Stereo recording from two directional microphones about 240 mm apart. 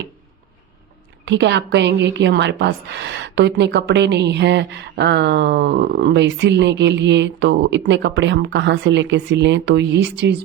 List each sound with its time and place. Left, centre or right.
1.2 s a woman's voice: right